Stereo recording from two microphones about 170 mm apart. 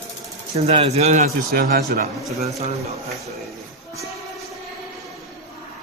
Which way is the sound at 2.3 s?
40° right (ahead or behind).